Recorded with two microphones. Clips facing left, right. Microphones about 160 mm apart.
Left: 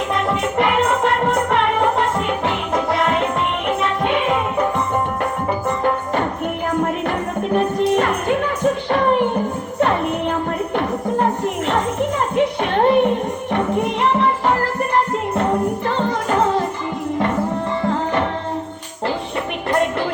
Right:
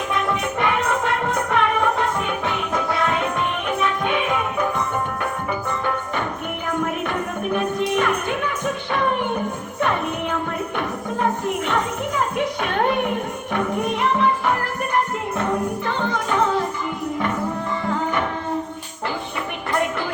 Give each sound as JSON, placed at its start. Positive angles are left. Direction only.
{"t": 0.3, "sound": "music", "side_deg": 30}
{"t": 10.8, "sound": "music", "side_deg": 35}
{"t": 17.8, "sound": "music", "side_deg": 30}
{"t": 19.7, "sound": "a sound", "side_deg": 30}